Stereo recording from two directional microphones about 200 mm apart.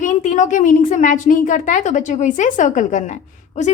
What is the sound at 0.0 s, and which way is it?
A woman's voice, 40° left (ahead or behind).